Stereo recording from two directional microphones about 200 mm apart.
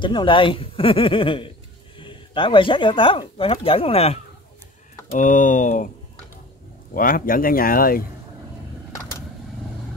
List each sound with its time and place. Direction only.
0.0 s speech: 25° left (ahead or behind)
5.2 s speech: 40° left (ahead or behind)
6.9 s speech: 45° left (ahead or behind)